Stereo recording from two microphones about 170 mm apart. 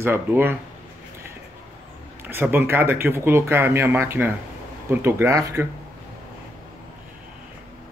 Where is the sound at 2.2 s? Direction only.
10° right (ahead or behind).